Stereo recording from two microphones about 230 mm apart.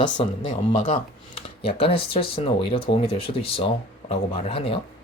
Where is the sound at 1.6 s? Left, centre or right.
Left.